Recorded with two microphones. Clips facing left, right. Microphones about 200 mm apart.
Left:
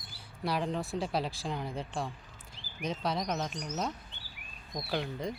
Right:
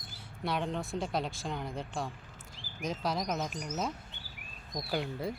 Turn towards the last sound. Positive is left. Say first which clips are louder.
# even
turn(degrees=-5)  # may be behind; listen again after turning